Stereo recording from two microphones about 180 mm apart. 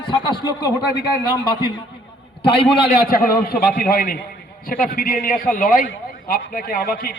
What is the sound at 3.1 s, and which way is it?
A man's voice, 55° left (ahead or behind).